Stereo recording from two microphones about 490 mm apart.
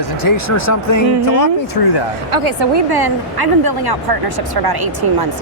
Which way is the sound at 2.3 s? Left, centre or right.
Right.